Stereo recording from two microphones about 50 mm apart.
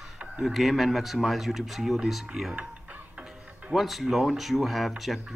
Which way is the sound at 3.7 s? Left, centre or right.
Centre.